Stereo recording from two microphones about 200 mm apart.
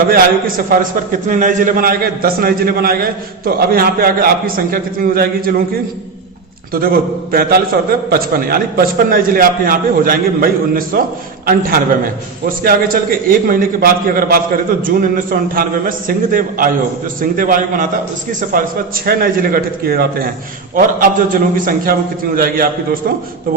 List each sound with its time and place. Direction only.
0.1 s a man's voice: 45° right (ahead or behind)
6.7 s a man's voice: 45° right (ahead or behind)
12.5 s a man's voice: 45° right (ahead or behind)